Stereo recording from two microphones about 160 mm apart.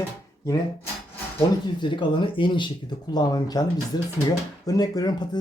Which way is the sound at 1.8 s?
30° left (ahead or behind).